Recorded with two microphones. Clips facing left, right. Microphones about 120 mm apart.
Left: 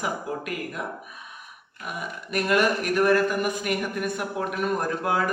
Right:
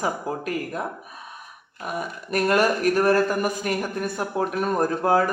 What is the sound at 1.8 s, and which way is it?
Speech, 40° right (ahead or behind).